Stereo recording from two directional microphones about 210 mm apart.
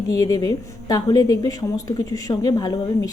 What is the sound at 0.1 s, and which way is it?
Speech, 15° left (ahead or behind).